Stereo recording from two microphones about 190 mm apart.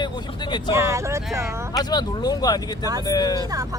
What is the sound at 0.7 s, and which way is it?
Speech, 15° right (ahead or behind).